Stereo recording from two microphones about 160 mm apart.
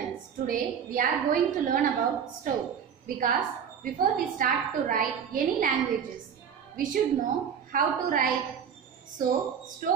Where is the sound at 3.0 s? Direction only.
55° right (ahead or behind).